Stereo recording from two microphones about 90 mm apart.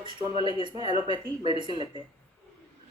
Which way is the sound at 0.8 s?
90° left.